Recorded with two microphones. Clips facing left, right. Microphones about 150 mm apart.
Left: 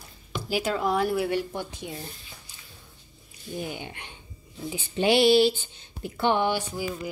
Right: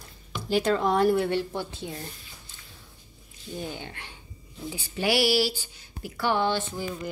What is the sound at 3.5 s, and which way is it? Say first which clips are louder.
Speech: left 1 dB; 15° left (ahead or behind).